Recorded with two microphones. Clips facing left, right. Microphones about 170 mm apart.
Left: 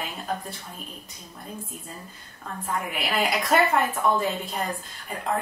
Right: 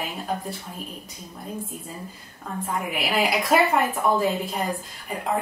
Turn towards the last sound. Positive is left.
turn(degrees=0)  # may be behind; listen again after turning